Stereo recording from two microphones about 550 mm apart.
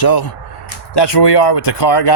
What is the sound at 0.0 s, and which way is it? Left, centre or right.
Speech, left.